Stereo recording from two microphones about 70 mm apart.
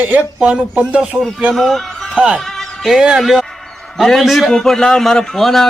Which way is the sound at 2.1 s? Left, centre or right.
Centre.